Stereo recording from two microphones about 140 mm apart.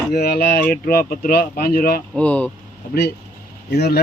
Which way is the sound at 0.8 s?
90° left.